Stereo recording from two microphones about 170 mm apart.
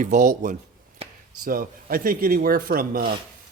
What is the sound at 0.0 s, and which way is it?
Speech, 45° right (ahead or behind).